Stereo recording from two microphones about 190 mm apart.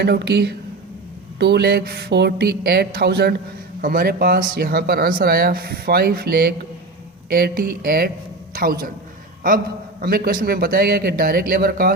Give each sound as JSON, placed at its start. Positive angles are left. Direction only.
{"t": 0.0, "sound": "a woman's voice", "side_deg": -60}
{"t": 10.0, "sound": "speech", "side_deg": -50}